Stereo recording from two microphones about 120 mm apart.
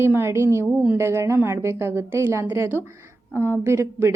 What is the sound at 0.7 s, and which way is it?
Speech, 10° right (ahead or behind).